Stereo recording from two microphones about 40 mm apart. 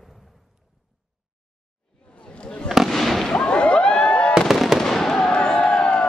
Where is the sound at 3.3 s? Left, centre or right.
Left.